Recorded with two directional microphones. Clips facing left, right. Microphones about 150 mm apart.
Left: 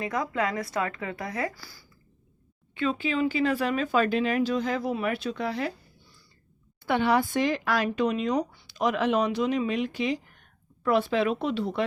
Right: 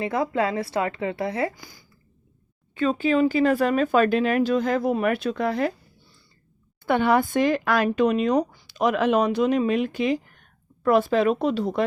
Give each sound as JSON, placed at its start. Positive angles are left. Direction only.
{"t": 0.0, "sound": "a woman's voice", "side_deg": -30}
{"t": 2.7, "sound": "speech", "side_deg": -40}
{"t": 6.8, "sound": "speech", "side_deg": -50}